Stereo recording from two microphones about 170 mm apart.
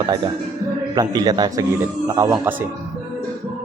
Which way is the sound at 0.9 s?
25° right (ahead or behind).